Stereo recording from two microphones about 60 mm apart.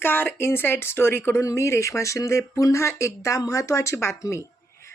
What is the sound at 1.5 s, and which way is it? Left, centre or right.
A woman's voice, left.